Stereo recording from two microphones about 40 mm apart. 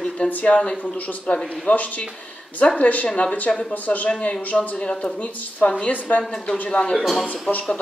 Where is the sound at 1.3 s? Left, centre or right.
Left.